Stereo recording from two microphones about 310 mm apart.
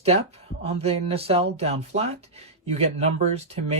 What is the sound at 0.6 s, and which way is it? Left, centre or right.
Speech, centre.